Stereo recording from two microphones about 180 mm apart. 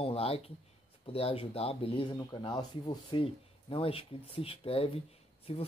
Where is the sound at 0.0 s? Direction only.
35° left (ahead or behind).